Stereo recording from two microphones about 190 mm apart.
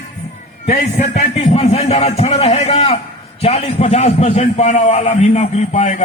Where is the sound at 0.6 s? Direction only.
40° left (ahead or behind).